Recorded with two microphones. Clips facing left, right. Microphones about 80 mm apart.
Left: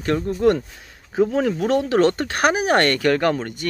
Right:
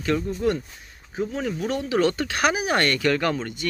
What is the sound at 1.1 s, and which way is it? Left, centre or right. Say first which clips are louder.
Speech: left 8 dB; left.